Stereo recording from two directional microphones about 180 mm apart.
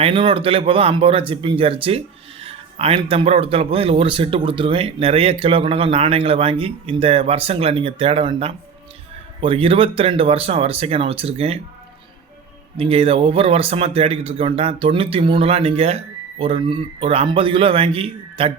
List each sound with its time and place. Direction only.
0.0 s speech: 30° right (ahead or behind)
12.7 s speech: 35° right (ahead or behind)